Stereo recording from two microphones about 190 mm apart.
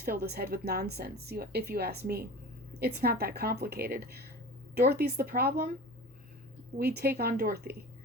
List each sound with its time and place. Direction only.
0.0 s speech: 55° right (ahead or behind)
6.7 s speech: 55° right (ahead or behind)